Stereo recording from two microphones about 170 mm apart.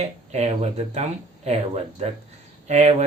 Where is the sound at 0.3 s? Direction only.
40° right (ahead or behind).